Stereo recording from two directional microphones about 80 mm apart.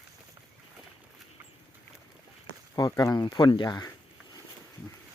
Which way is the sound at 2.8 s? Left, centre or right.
Left.